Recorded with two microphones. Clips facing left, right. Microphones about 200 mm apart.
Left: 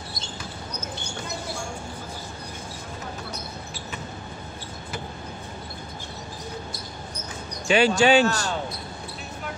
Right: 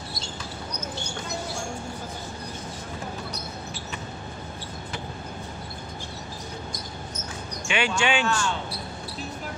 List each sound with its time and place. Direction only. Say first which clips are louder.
7.6 s speech: left 7 dB; 35° left (ahead or behind)